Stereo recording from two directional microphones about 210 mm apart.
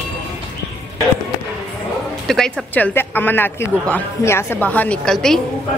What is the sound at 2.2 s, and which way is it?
Speech, centre (ahead or behind).